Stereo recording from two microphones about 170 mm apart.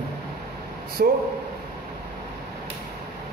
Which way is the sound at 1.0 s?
60° right (ahead or behind).